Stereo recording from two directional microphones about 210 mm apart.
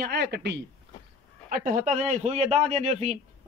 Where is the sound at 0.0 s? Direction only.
50° right (ahead or behind).